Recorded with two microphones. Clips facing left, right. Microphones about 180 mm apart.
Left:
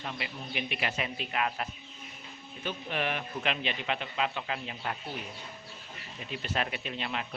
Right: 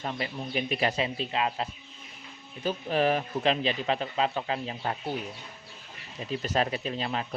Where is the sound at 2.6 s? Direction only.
35° right (ahead or behind).